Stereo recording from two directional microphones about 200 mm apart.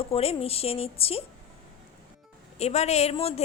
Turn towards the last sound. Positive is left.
turn(degrees=30)  # may be behind; listen again after turning